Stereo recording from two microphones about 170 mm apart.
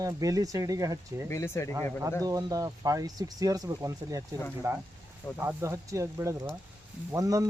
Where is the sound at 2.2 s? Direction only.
20° right (ahead or behind).